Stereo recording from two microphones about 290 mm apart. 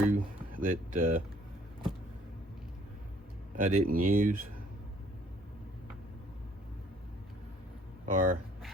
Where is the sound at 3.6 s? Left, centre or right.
Right.